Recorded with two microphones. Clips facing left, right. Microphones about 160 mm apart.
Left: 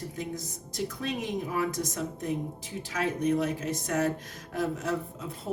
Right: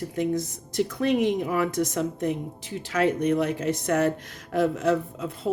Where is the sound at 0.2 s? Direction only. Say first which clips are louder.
Right 14 dB; 70° right (ahead or behind).